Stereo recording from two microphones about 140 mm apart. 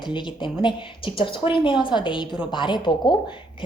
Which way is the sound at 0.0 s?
35° left (ahead or behind).